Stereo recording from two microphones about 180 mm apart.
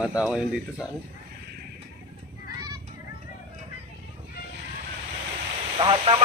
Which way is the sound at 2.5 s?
25° right (ahead or behind).